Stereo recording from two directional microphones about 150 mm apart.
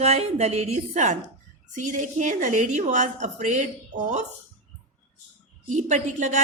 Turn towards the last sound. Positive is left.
turn(degrees=-55)  # may be behind; listen again after turning